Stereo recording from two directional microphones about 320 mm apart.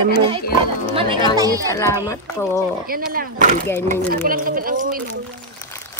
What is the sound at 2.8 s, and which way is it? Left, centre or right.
Speech, right.